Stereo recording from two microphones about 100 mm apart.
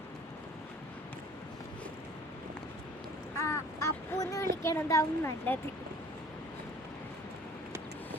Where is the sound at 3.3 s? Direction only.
30° left (ahead or behind).